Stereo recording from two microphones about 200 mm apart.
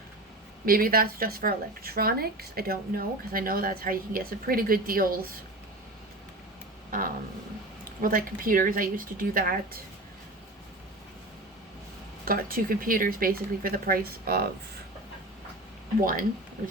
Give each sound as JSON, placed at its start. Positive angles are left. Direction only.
{"t": 0.6, "sound": "speech", "side_deg": -45}
{"t": 8.0, "sound": "speech", "side_deg": -45}
{"t": 12.2, "sound": "speech", "side_deg": -45}
{"t": 16.0, "sound": "speech", "side_deg": -45}